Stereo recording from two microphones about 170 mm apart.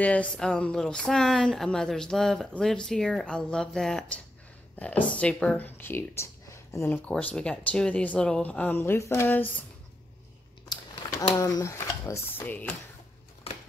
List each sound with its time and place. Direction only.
0.0 s speech: 10° left (ahead or behind)
10.7 s speech: 20° left (ahead or behind)